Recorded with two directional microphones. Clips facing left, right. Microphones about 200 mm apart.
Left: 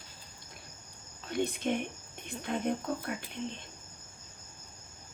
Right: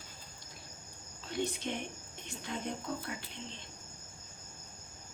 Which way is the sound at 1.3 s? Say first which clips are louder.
Left 5 dB; 55° left (ahead or behind).